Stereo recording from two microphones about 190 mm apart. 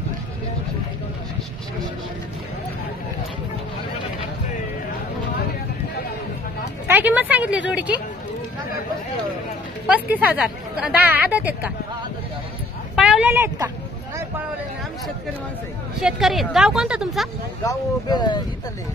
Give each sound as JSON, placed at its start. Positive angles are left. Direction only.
{"t": 6.9, "sound": "speech", "side_deg": -10}
{"t": 10.1, "sound": "speech", "side_deg": -5}
{"t": 12.9, "sound": "speech", "side_deg": -5}
{"t": 16.0, "sound": "speech", "side_deg": 0}
{"t": 17.6, "sound": "speech", "side_deg": 20}